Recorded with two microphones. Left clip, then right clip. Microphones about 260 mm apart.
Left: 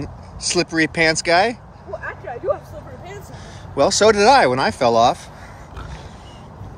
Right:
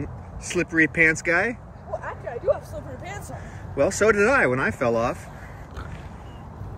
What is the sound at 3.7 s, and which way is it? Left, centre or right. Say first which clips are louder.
Speech: left 5 dB; centre.